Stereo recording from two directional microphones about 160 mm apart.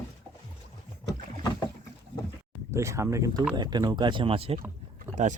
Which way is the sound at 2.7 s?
20° right (ahead or behind).